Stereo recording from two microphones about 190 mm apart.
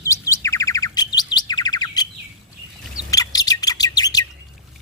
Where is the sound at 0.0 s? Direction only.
15° left (ahead or behind).